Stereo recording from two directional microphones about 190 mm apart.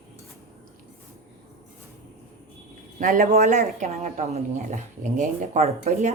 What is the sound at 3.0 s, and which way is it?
Speech, 45° right (ahead or behind).